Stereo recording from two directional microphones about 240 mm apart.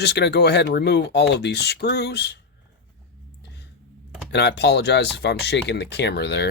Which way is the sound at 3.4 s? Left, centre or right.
Left.